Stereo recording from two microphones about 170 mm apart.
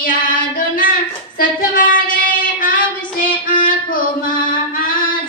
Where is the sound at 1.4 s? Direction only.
55° left (ahead or behind).